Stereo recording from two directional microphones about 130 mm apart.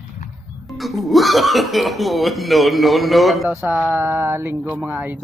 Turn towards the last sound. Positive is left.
turn(degrees=-15)  # may be behind; listen again after turning